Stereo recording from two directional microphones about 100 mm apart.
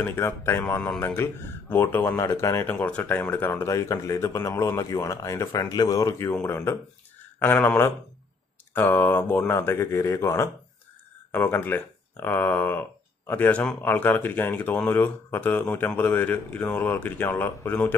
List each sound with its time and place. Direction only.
0.0 s speech: 25° left (ahead or behind)
3.6 s speech: 30° left (ahead or behind)
11.3 s speech: 20° left (ahead or behind)